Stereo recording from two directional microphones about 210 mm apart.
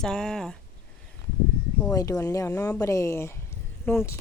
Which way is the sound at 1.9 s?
15° left (ahead or behind).